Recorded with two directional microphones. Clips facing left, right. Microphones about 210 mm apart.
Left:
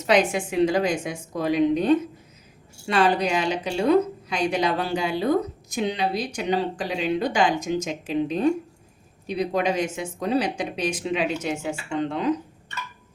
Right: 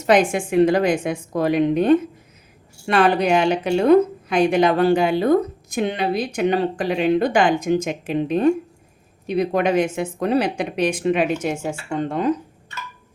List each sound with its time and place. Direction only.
0.1 s a woman's voice: 50° right (ahead or behind)